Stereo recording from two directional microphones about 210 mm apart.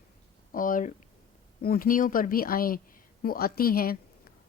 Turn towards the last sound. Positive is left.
turn(degrees=45)  # may be behind; listen again after turning